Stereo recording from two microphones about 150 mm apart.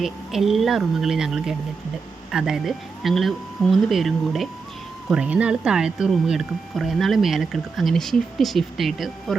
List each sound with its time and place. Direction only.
0.0 s speech: centre (ahead or behind)